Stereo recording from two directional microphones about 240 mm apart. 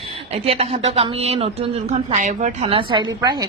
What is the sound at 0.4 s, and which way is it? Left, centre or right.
Speech, right.